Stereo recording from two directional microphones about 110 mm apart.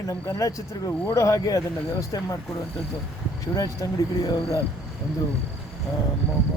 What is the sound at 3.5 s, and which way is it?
Speech, 35° left (ahead or behind).